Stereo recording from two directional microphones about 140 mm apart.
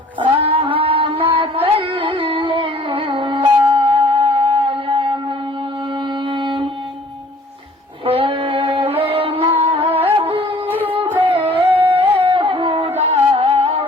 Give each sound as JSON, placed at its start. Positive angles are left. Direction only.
{"t": 0.2, "sound": "music", "side_deg": -40}
{"t": 6.2, "sound": "music", "side_deg": -35}
{"t": 8.0, "sound": "music", "side_deg": -40}
{"t": 8.9, "sound": "music", "side_deg": -45}
{"t": 11.8, "sound": "music", "side_deg": -15}
{"t": 12.1, "sound": "music", "side_deg": -40}
{"t": 13.0, "sound": "music", "side_deg": -45}